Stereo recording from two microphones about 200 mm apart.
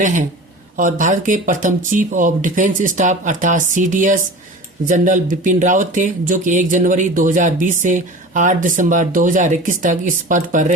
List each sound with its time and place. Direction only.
0.0 s speech: 40° right (ahead or behind)